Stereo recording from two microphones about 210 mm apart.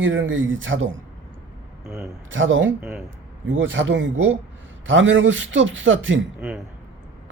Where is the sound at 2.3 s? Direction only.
65° right (ahead or behind).